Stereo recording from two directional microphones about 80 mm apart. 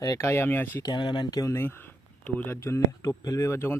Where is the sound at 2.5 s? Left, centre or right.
Left.